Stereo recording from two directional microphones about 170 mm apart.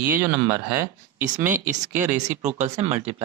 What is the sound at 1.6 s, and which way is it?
Speech, 50° right (ahead or behind).